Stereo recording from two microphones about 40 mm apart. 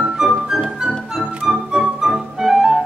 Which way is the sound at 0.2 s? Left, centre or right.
Centre.